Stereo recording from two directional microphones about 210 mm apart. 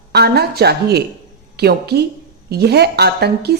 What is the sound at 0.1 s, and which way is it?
A woman's voice, 50° right (ahead or behind).